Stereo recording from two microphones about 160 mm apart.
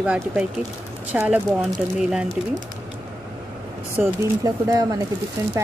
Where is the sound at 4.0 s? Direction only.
20° right (ahead or behind).